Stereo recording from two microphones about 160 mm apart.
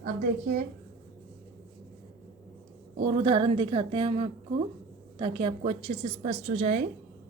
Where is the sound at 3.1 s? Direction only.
35° right (ahead or behind).